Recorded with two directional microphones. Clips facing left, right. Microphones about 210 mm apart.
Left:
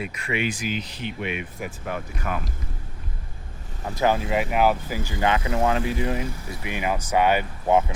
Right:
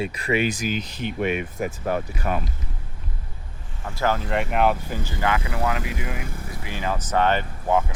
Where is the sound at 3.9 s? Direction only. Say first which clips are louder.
Left 2 dB; 15° left (ahead or behind).